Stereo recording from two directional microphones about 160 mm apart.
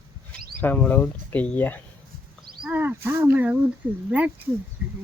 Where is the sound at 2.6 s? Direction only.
15° right (ahead or behind).